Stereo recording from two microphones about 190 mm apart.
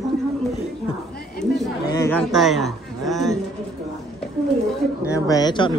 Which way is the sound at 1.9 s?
15° left (ahead or behind).